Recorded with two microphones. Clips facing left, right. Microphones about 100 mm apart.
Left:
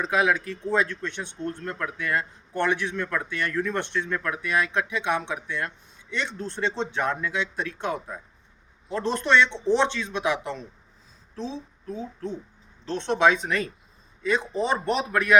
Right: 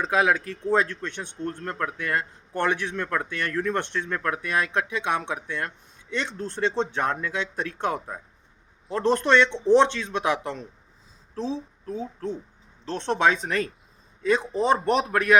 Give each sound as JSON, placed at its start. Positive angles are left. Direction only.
{"t": 0.1, "sound": "speech", "side_deg": -40}